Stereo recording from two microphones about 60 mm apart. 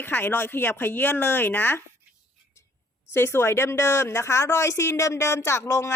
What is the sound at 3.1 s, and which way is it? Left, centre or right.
Speech, left.